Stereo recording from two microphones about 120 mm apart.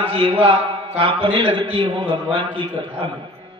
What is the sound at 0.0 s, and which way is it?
A man's voice, 45° right (ahead or behind).